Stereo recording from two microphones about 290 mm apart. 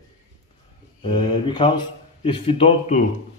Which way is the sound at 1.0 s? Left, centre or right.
Centre.